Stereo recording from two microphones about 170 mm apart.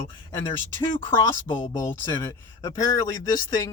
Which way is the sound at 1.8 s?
15° left (ahead or behind).